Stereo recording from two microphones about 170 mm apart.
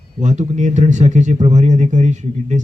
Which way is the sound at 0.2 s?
45° right (ahead or behind).